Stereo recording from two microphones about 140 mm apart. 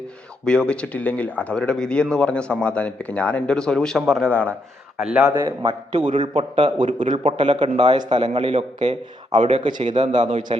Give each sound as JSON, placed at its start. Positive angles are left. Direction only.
{"t": 0.4, "sound": "speech", "side_deg": 5}
{"t": 4.9, "sound": "a man's voice", "side_deg": -5}
{"t": 5.3, "sound": "a man's voice", "side_deg": -35}
{"t": 6.8, "sound": "a man's voice", "side_deg": -65}
{"t": 7.3, "sound": "a man's voice", "side_deg": -35}
{"t": 9.4, "sound": "a man's voice", "side_deg": -35}
{"t": 9.8, "sound": "a man's voice", "side_deg": -55}
{"t": 10.5, "sound": "a man's voice", "side_deg": -45}